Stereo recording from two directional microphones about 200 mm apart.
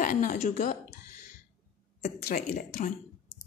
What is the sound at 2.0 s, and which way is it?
Speech, 40° left (ahead or behind).